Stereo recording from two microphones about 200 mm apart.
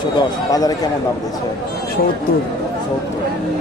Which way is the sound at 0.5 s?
20° left (ahead or behind).